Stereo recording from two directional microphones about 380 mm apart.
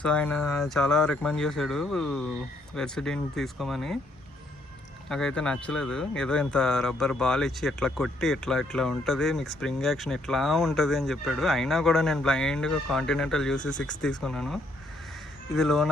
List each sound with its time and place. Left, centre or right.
0.0 s speech: centre
5.0 s speech: centre